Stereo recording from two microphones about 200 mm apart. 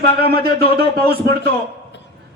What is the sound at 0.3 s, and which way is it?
A man's voice, 50° right (ahead or behind).